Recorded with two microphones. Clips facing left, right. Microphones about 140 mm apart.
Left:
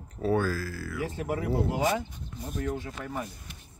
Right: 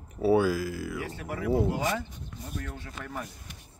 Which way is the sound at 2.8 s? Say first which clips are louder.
Left 3 dB; 10° left (ahead or behind).